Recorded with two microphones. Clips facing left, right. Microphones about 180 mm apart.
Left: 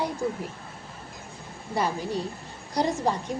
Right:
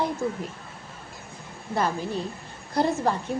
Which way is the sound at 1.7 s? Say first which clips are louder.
Right 1 dB; 15° left (ahead or behind).